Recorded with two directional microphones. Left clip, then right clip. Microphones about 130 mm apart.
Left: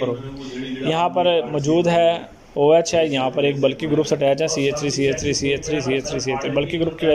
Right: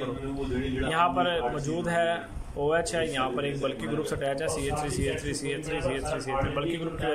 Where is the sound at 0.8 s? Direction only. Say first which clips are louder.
Left 7 dB; 35° left (ahead or behind).